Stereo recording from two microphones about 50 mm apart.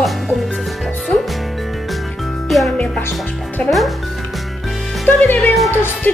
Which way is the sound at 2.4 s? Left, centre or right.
Centre.